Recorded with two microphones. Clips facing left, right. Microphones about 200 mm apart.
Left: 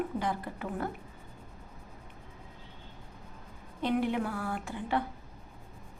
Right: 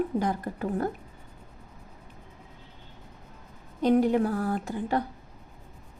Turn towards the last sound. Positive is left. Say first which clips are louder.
# right 4 dB
turn(degrees=-40)  # may be behind; listen again after turning